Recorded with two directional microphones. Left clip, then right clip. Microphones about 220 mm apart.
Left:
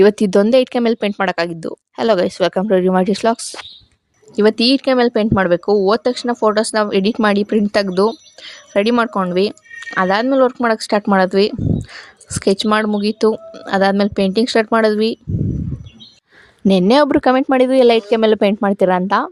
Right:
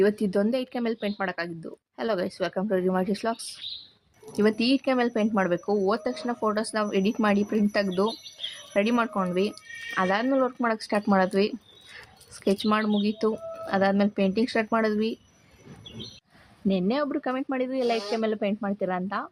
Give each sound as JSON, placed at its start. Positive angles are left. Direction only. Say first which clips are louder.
{"t": 0.0, "sound": "speech", "louder": "left 12 dB", "side_deg": 45}
{"t": 16.6, "sound": "speech", "louder": "left 15 dB", "side_deg": 50}